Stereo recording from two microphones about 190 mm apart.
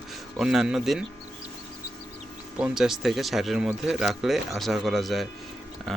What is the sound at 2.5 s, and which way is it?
Speech, 5° right (ahead or behind).